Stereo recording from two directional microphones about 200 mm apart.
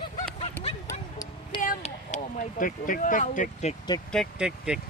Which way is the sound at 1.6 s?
40° left (ahead or behind).